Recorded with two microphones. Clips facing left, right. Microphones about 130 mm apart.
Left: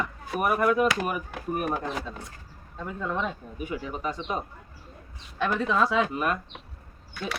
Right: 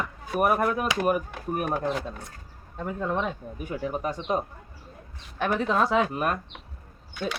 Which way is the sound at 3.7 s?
50° right (ahead or behind).